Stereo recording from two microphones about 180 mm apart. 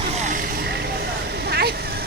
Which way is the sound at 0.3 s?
45° right (ahead or behind).